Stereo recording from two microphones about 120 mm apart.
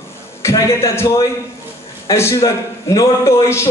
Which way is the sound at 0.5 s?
25° left (ahead or behind).